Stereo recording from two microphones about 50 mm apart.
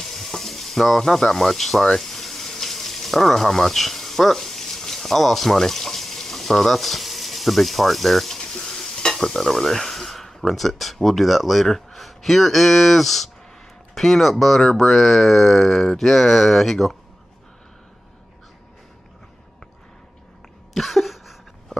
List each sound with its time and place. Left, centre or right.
0.0 s sizzle: centre
8.4 s stir: centre
13.9 s speech: centre
20.7 s a sound: centre